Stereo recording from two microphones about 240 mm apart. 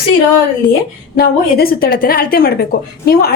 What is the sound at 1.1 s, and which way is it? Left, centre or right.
A woman's voice, left.